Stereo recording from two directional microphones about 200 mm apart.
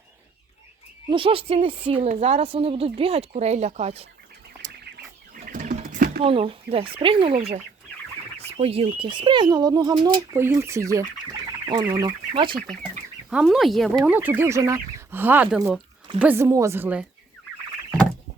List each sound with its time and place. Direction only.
1.1 s speech: 25° right (ahead or behind)
4.6 s duck: 35° right (ahead or behind)
5.5 s bird: 40° right (ahead or behind)
6.2 s speech: 25° right (ahead or behind)
13.3 s speech: centre (ahead or behind)
14.1 s speech: 10° right (ahead or behind)